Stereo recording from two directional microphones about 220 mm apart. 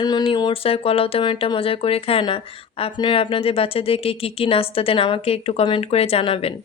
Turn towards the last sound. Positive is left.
turn(degrees=25)  # may be behind; listen again after turning